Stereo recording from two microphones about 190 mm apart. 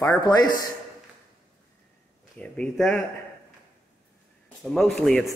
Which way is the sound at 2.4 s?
5° left (ahead or behind).